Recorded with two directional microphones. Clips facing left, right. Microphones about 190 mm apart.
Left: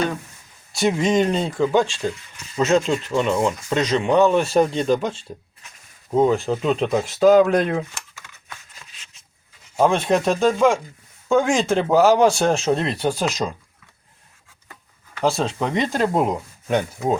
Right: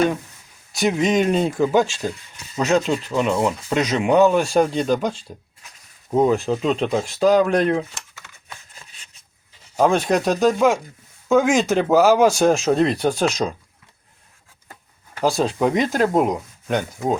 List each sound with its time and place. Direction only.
0.7 s speech: centre (ahead or behind)
9.7 s speech: centre (ahead or behind)
15.2 s speech: centre (ahead or behind)